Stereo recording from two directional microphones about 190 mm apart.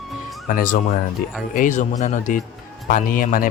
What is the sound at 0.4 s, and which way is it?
Speech, 45° left (ahead or behind).